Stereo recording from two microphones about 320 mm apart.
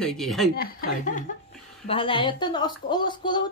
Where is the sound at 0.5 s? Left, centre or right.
Left.